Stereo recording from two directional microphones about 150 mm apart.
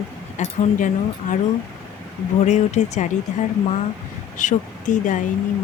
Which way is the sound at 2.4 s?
50° left (ahead or behind).